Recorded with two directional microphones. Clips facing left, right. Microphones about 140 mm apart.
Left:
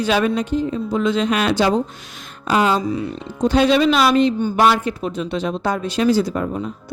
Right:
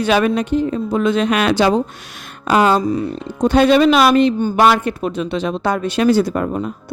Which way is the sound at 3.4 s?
55° right (ahead or behind).